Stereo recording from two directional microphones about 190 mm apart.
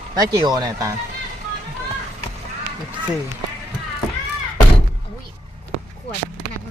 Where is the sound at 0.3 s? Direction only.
20° right (ahead or behind).